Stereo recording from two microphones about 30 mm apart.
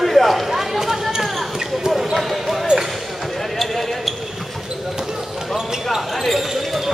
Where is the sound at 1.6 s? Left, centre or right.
Centre.